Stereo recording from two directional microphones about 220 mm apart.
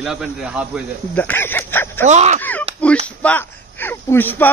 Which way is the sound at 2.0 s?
30° right (ahead or behind).